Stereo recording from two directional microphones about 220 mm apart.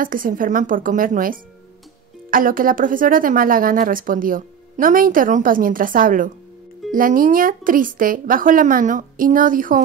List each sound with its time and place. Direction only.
0.0 s speech: 40° right (ahead or behind)